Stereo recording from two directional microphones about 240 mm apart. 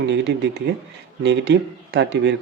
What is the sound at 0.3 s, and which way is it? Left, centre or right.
Speech, right.